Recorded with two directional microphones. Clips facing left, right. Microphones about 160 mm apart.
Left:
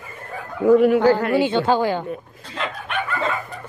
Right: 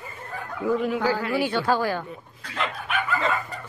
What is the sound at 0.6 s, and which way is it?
Speech, 60° left (ahead or behind).